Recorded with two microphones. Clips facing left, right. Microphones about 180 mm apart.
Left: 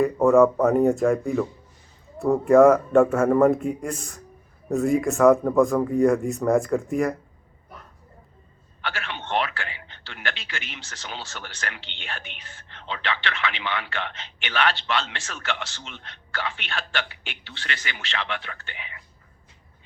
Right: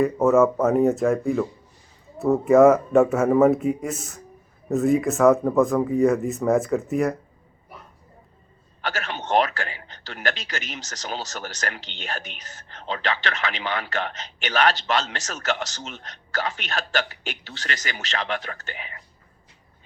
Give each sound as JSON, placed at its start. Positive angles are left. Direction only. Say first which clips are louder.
{"t": 0.0, "sound": "speech", "louder": "left 1 dB", "side_deg": 0}
{"t": 8.8, "sound": "a man's voice", "louder": "right 3 dB", "side_deg": -40}